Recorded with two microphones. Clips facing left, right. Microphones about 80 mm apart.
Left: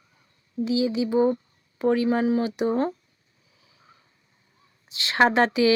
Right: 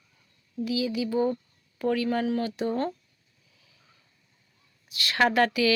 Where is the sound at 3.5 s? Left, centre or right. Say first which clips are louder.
Left 7 dB; left.